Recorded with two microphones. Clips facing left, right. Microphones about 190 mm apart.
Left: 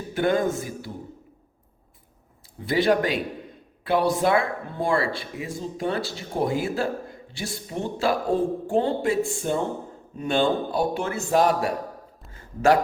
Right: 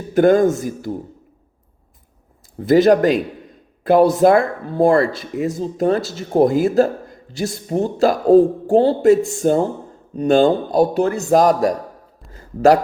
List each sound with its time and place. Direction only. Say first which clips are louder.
0.1 s speech: right 10 dB; 45° right (ahead or behind)
2.6 s speech: right 9 dB; 40° right (ahead or behind)
12.3 s a sound: right 6 dB; 40° right (ahead or behind)